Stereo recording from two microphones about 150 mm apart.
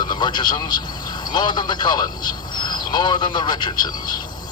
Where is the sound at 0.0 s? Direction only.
30° left (ahead or behind).